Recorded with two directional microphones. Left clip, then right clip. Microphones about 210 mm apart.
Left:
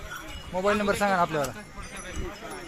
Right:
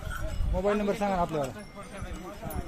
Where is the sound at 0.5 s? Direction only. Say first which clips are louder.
Left 3 dB; centre (ahead or behind).